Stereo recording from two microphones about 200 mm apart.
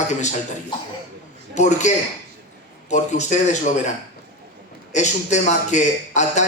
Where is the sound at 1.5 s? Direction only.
35° left (ahead or behind).